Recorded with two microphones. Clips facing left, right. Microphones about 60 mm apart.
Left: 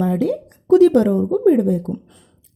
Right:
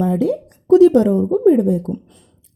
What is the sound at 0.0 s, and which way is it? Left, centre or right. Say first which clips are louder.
A woman's voice: right 1 dB; left.